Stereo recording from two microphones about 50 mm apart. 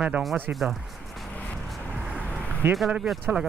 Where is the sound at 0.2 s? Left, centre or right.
Centre.